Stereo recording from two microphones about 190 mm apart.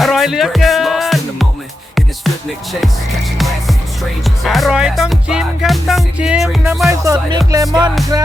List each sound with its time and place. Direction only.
0.0 s music: centre (ahead or behind)
3.3 s music: centre (ahead or behind)
7.0 s music: 20° right (ahead or behind)